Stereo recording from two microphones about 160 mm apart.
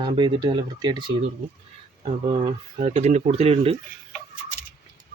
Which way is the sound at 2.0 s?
45° right (ahead or behind).